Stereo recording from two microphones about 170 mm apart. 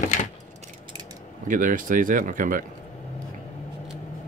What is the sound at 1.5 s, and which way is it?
Speech, 50° right (ahead or behind).